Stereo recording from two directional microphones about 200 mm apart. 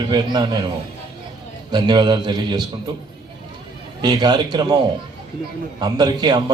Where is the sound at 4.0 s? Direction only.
20° right (ahead or behind).